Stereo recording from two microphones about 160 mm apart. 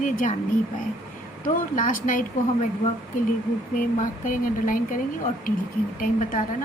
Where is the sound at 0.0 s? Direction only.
55° left (ahead or behind).